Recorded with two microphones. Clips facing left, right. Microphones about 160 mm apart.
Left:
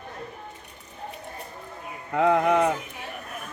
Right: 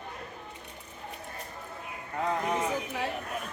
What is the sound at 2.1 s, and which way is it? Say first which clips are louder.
Speech: left 10 dB; 75° left (ahead or behind).